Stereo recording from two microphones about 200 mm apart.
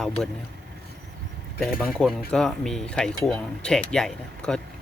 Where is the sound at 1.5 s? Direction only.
Centre (ahead or behind).